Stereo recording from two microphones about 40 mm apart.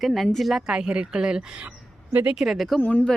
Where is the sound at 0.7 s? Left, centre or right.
Right.